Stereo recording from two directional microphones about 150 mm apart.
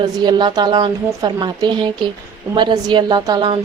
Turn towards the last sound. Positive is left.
turn(degrees=-30)  # may be behind; listen again after turning